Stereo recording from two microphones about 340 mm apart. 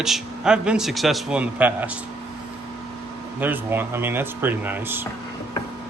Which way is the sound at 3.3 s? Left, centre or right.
Centre.